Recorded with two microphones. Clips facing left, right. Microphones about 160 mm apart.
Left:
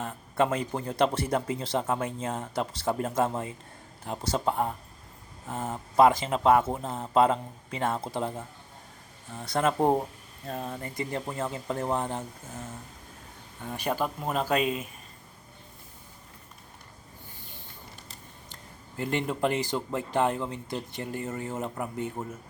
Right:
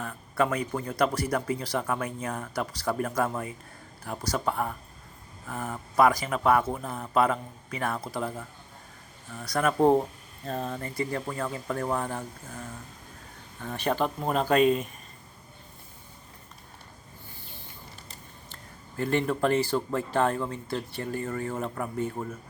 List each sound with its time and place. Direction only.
0.0 s speech: 25° left (ahead or behind)
9.7 s speech: 15° left (ahead or behind)
18.9 s speech: 20° left (ahead or behind)